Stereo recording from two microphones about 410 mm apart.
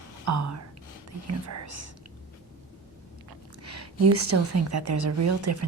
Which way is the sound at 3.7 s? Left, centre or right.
Right.